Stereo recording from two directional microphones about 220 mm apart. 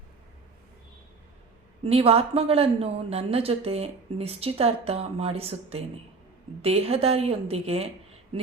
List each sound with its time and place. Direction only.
1.8 s a woman's voice: 25° right (ahead or behind)